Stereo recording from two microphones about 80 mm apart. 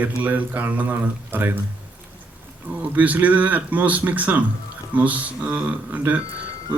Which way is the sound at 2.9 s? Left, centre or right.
Centre.